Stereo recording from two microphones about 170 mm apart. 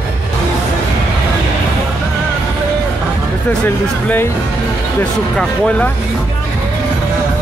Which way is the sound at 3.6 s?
10° left (ahead or behind).